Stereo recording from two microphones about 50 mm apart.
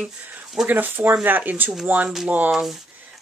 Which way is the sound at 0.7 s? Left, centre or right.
Right.